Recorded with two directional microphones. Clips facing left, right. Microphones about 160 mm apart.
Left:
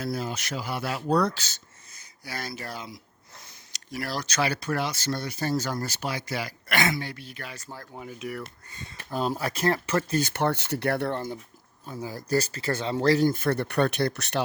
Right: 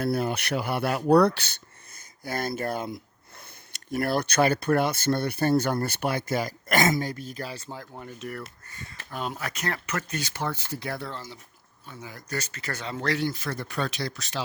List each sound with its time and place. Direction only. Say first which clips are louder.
0.0 s speech: right 5 dB; 60° right (ahead or behind); by 7.7 s 30° right (ahead or behind)
7.9 s speech: left 4 dB; 5° left (ahead or behind)
8.7 s speech: left 1 dB; 20° left (ahead or behind)
9.1 s speech: left 5 dB; 35° left (ahead or behind)
10.3 s speech: left 6 dB; 70° left (ahead or behind)
11.9 s speech: left 8 dB; 35° left (ahead or behind); by 14.4 s 65° left (ahead or behind)